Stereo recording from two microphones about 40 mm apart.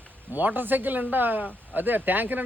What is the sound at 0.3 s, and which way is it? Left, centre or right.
A man's voice, right.